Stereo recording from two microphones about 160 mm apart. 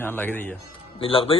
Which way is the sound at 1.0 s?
35° left (ahead or behind).